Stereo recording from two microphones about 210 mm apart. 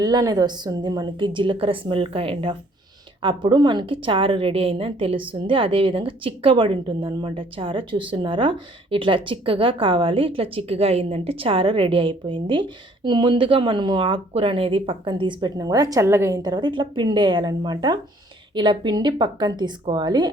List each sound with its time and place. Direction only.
0.0 s a woman's voice: 20° right (ahead or behind)